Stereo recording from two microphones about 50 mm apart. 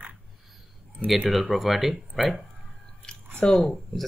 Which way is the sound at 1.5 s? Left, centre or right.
Centre.